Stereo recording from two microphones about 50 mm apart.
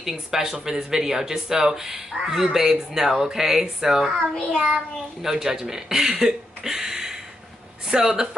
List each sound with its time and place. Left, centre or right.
0.0 s a child's voice: centre